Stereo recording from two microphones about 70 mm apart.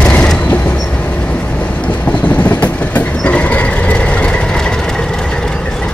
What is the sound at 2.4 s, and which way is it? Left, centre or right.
Train, left.